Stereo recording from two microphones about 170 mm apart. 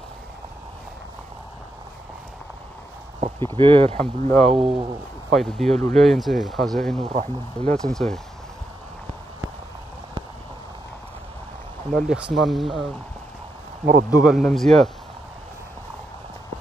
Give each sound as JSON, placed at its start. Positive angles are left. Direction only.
{"t": 3.3, "sound": "speech", "side_deg": -30}
{"t": 4.0, "sound": "speech", "side_deg": 5}
{"t": 4.5, "sound": "speech", "side_deg": -35}
{"t": 5.3, "sound": "speech", "side_deg": 0}
{"t": 11.9, "sound": "speech", "side_deg": 0}
{"t": 14.1, "sound": "speech", "side_deg": -5}